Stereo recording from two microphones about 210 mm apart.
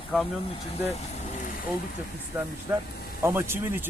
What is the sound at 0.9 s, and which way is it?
Vehicle, 35° left (ahead or behind).